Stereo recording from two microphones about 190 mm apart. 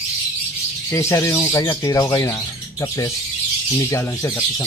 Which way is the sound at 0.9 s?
15° left (ahead or behind).